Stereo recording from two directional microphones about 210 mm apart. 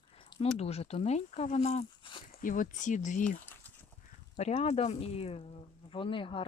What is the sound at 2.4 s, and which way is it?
Speech, 40° left (ahead or behind).